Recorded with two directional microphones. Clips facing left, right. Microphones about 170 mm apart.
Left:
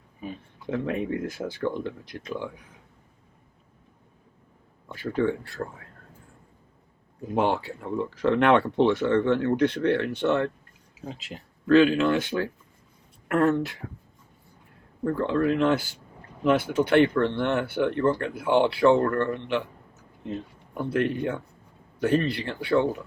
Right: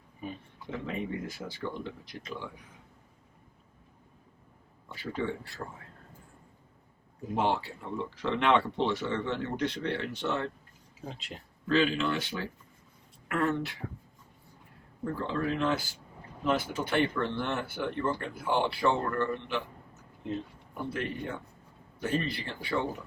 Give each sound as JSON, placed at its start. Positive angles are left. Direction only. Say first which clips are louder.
{"t": 0.7, "sound": "speech", "louder": "left 7 dB", "side_deg": 55}
{"t": 4.9, "sound": "speech", "louder": "left 8 dB", "side_deg": 50}
{"t": 7.9, "sound": "speech", "louder": "left 9 dB", "side_deg": 50}
{"t": 11.0, "sound": "speech", "louder": "left 4 dB", "side_deg": 0}
{"t": 11.7, "sound": "speech", "louder": "left 9 dB", "side_deg": 50}
{"t": 15.0, "sound": "speech", "louder": "left 8 dB", "side_deg": 60}
{"t": 20.9, "sound": "speech", "louder": "left 11 dB", "side_deg": 65}